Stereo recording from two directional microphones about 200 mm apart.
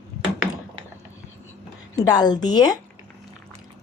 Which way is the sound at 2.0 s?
20° left (ahead or behind).